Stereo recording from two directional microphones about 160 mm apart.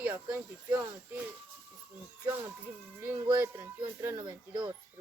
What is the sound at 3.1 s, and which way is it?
Speech, 10° right (ahead or behind).